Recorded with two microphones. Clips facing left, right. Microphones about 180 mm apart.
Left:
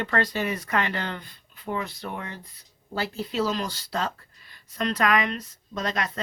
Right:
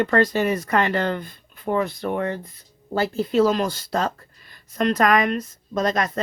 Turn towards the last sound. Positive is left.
turn(degrees=-45)  # may be behind; listen again after turning